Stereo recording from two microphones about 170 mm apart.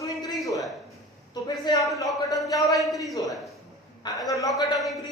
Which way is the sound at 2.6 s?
20° left (ahead or behind).